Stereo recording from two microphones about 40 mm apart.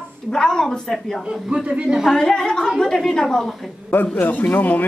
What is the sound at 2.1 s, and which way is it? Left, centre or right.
A woman's voice, centre.